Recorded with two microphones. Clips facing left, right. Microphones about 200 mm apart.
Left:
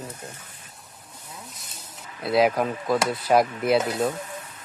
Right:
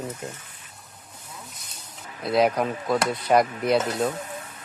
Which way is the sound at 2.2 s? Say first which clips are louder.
Left 1 dB; centre (ahead or behind).